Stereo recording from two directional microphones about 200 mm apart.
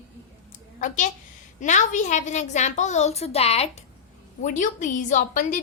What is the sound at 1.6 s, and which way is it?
A woman's voice, 40° left (ahead or behind).